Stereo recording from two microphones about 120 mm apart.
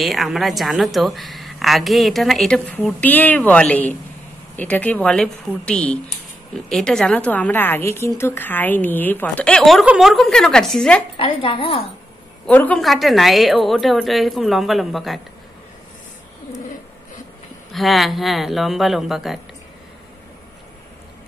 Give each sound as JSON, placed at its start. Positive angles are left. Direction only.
{"t": 0.0, "sound": "a woman's voice", "side_deg": 0}
{"t": 11.1, "sound": "a woman's voice", "side_deg": 50}
{"t": 12.4, "sound": "a woman's voice", "side_deg": 10}
{"t": 12.8, "sound": "a woman's voice", "side_deg": 0}
{"t": 17.7, "sound": "a woman's voice", "side_deg": 0}